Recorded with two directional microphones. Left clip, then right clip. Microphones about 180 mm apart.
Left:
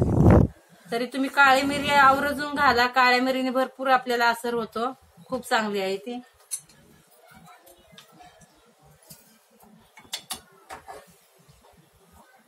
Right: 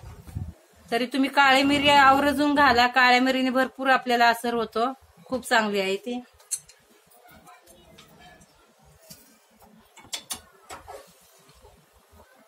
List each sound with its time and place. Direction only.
0.8 s a woman's voice: 25° right (ahead or behind)